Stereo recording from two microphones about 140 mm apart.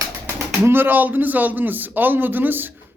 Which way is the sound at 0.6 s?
15° right (ahead or behind).